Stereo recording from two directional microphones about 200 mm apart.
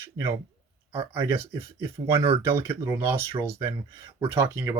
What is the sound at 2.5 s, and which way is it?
Speech, 10° right (ahead or behind).